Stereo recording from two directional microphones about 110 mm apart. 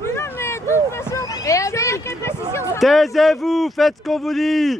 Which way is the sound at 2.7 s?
Centre (ahead or behind).